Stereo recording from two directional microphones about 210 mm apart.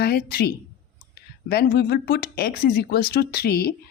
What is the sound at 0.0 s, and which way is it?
Speech, 50° left (ahead or behind).